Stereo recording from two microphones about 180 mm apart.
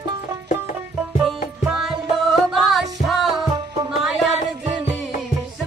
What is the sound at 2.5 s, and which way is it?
Music, centre (ahead or behind).